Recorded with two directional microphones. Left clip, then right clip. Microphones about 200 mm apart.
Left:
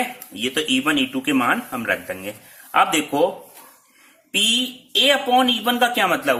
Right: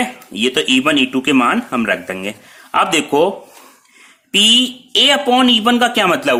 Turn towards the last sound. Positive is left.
turn(degrees=-50)  # may be behind; listen again after turning